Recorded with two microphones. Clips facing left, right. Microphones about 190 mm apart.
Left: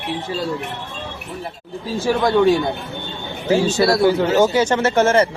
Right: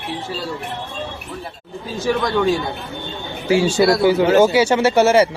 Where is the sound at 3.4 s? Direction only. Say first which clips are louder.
Right 1 dB; 10° right (ahead or behind).